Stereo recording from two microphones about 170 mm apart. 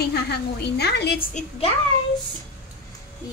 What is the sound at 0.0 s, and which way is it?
A woman's voice, 70° left (ahead or behind).